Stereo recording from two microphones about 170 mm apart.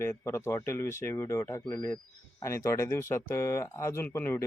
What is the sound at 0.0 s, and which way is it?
A man's voice, 15° left (ahead or behind).